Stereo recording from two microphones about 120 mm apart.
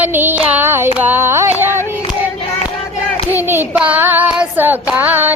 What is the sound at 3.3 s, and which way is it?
Child singing, 20° right (ahead or behind).